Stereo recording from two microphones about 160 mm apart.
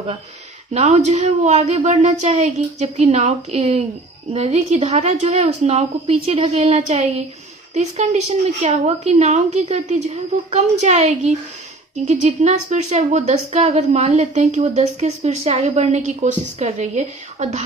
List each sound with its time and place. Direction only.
0.7 s a woman's voice: 45° right (ahead or behind)